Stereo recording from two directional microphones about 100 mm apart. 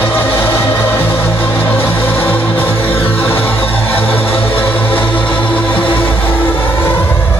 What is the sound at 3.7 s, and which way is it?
Music, 15° left (ahead or behind).